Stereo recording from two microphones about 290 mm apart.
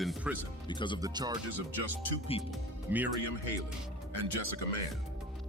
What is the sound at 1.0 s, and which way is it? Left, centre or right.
Speech, centre.